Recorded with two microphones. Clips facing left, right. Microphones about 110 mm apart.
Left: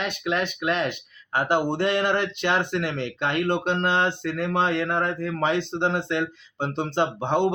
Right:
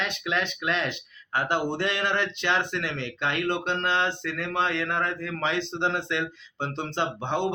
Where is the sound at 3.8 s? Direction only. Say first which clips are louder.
Left 3 dB; 35° left (ahead or behind).